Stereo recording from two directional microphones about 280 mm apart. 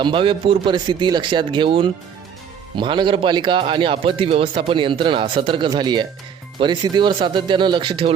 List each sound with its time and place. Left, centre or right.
0.0 s speech: centre